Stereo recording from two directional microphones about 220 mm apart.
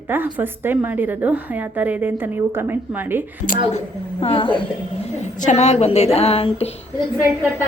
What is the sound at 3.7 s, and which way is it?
A woman's voice, 25° left (ahead or behind).